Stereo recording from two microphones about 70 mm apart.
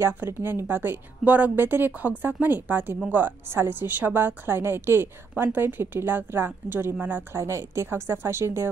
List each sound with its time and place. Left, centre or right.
0.0 s a woman's voice: right
7.3 s a woman's voice: right